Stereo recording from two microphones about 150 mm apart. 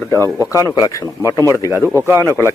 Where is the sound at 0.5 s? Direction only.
25° left (ahead or behind).